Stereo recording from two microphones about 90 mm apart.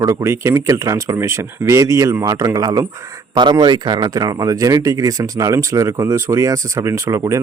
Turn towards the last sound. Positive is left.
turn(degrees=-35)  # may be behind; listen again after turning